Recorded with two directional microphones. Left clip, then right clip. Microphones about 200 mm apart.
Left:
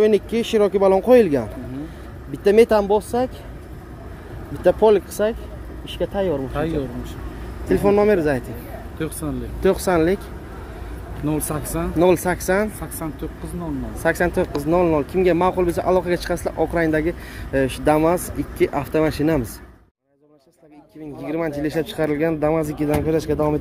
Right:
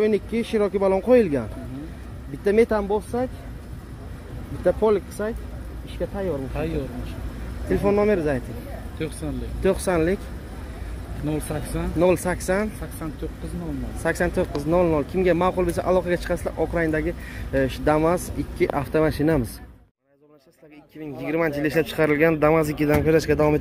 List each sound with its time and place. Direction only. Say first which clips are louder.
0.0 s speech: left 5 dB; 20° left (ahead or behind)
4.6 s speech: left 5 dB; 25° left (ahead or behind)
7.6 s speech: left 4 dB; 20° left (ahead or behind)
8.9 s speech: left 3 dB; 60° left (ahead or behind)
9.6 s speech: left 4 dB; 15° left (ahead or behind)
11.2 s speech: left 4 dB; 65° left (ahead or behind)
12.0 s speech: left 3 dB; 15° left (ahead or behind)
14.0 s speech: left 4 dB; 15° left (ahead or behind)
21.2 s speech: right 1 dB; 5° left (ahead or behind)